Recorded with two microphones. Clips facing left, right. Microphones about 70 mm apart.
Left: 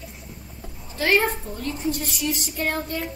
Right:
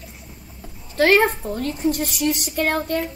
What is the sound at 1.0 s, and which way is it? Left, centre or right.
A woman's voice, right.